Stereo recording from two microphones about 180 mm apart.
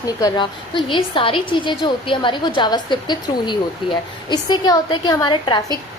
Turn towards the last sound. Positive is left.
turn(degrees=25)  # may be behind; listen again after turning